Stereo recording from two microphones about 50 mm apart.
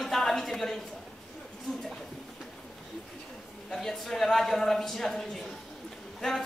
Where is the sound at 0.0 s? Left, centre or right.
Centre.